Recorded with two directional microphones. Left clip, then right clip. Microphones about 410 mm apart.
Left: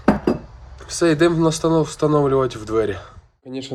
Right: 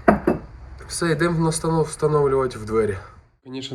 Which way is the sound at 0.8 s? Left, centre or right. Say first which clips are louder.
Left 5 dB; left.